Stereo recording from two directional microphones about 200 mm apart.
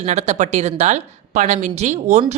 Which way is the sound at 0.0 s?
35° right (ahead or behind).